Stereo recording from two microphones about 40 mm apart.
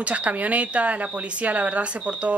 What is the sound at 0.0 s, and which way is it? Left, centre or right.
Speech, right.